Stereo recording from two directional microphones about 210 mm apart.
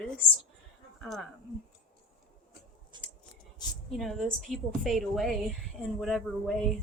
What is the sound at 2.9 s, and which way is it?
Scissors, 20° right (ahead or behind).